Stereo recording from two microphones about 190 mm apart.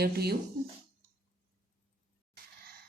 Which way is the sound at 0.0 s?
55° right (ahead or behind).